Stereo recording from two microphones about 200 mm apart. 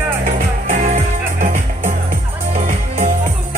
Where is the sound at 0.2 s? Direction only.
40° right (ahead or behind).